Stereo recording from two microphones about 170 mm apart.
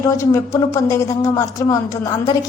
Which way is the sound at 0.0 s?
20° left (ahead or behind).